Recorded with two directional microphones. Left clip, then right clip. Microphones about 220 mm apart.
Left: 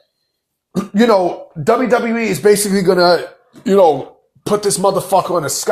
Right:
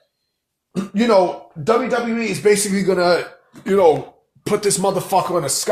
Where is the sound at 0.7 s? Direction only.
30° left (ahead or behind); by 5.7 s 10° left (ahead or behind).